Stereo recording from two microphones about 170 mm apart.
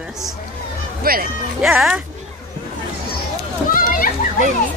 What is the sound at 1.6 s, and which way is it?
Speech, 5° right (ahead or behind).